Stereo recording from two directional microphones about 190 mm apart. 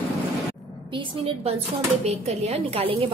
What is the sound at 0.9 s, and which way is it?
A woman's voice, 30° right (ahead or behind).